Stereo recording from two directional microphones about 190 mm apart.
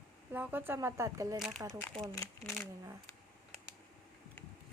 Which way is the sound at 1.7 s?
5° left (ahead or behind).